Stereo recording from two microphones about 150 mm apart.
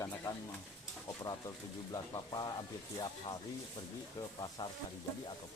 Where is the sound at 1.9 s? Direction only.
25° left (ahead or behind).